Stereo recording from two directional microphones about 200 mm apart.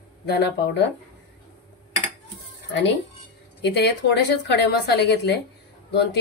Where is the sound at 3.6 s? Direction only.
55° left (ahead or behind).